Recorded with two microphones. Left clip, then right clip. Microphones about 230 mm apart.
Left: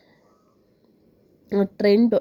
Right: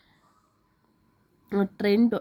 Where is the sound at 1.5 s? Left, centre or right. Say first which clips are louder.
Left 6 dB; centre.